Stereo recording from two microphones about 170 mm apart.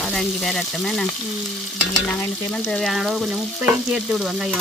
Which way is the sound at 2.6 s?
Centre (ahead or behind).